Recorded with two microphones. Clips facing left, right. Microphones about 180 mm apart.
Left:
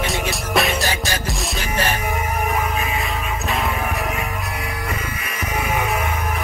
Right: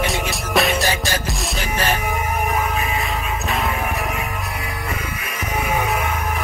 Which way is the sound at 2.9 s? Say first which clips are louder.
Right 1 dB; centre (ahead or behind).